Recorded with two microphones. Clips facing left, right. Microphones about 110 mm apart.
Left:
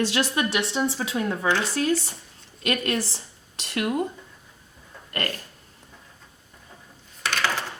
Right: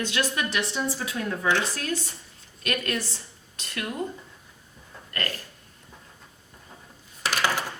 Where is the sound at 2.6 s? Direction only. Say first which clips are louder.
Left 3 dB; 30° left (ahead or behind).